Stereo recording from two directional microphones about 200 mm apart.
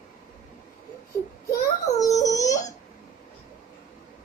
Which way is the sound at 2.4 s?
35° left (ahead or behind).